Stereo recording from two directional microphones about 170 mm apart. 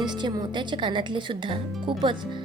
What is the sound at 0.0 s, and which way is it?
A woman's voice, 25° right (ahead or behind).